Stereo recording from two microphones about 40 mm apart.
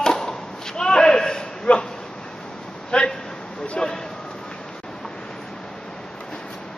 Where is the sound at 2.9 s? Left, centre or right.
Left.